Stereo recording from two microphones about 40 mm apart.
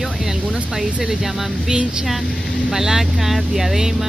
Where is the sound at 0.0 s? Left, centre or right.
Centre.